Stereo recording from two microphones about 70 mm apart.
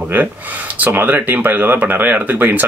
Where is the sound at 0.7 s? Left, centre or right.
Right.